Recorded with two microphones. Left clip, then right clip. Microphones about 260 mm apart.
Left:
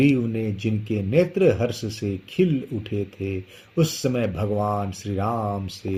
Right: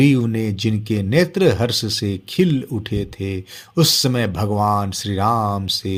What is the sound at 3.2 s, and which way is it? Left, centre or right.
Speech, right.